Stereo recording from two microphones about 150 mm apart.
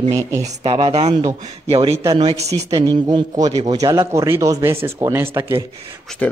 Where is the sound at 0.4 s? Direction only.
40° right (ahead or behind).